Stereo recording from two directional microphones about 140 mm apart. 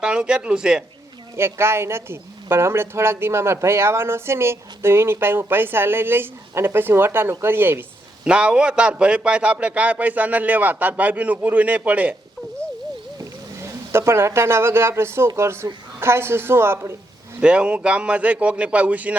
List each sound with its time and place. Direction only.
0.0 s speech: 5° right (ahead or behind)
1.4 s speech: 15° right (ahead or behind)
13.1 s speech: 20° right (ahead or behind)
17.4 s speech: 5° right (ahead or behind)